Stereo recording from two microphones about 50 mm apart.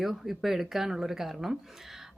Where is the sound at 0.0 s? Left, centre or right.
Centre.